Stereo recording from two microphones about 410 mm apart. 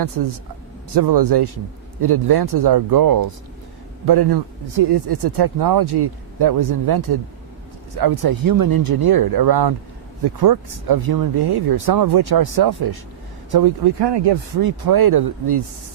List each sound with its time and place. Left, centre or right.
0.2 s speech: right
0.9 s speech: right